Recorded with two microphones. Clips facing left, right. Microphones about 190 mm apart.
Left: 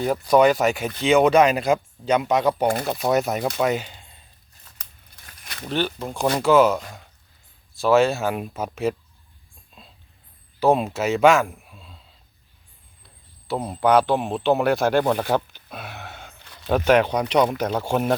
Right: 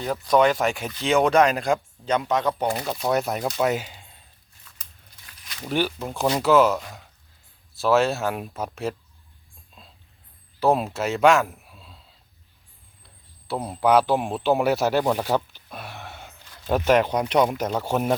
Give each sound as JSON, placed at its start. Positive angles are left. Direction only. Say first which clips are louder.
{"t": 0.0, "sound": "speech", "louder": "left 3 dB", "side_deg": 5}
{"t": 4.7, "sound": "scissors", "louder": "left 3 dB", "side_deg": 40}
{"t": 5.6, "sound": "speech", "louder": "even", "side_deg": -5}
{"t": 10.6, "sound": "speech", "louder": "left 2 dB", "side_deg": 0}
{"t": 13.5, "sound": "speech", "louder": "left 1 dB", "side_deg": -5}